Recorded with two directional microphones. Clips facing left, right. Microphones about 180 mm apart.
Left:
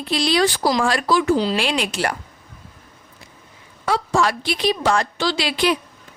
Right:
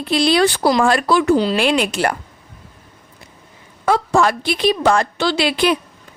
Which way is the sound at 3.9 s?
50° right (ahead or behind).